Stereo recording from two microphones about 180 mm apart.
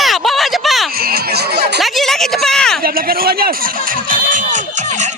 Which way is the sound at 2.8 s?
55° right (ahead or behind).